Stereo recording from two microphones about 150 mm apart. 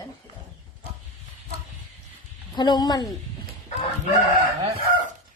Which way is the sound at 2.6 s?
30° left (ahead or behind).